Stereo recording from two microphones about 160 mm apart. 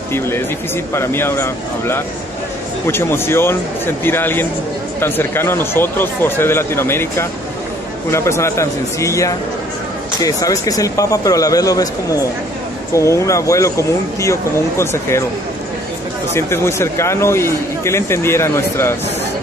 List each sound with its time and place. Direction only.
0.9 s speech: 15° left (ahead or behind)
12.9 s speech: 20° left (ahead or behind)
16.3 s speech: 15° left (ahead or behind)